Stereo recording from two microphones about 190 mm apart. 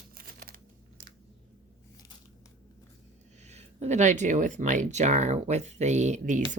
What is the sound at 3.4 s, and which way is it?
Speech, 35° right (ahead or behind).